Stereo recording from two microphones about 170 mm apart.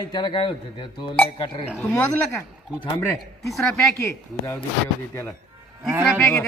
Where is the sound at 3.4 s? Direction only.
Centre (ahead or behind).